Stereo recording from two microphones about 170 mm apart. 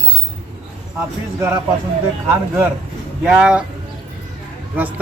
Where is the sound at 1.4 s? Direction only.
20° right (ahead or behind).